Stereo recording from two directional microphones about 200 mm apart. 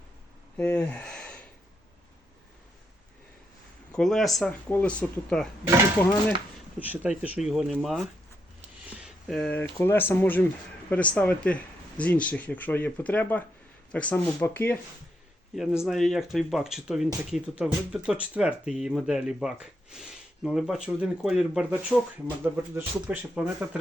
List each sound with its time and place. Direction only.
0.5 s speech: 5° left (ahead or behind)
3.9 s speech: centre (ahead or behind)
6.7 s speech: 10° right (ahead or behind); by 14.8 s 10° left (ahead or behind)
15.5 s speech: 5° right (ahead or behind)